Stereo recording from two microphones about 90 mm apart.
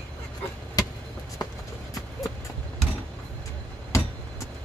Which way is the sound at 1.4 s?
45° left (ahead or behind).